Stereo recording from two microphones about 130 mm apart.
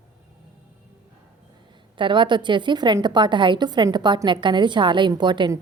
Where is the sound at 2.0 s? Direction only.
40° right (ahead or behind).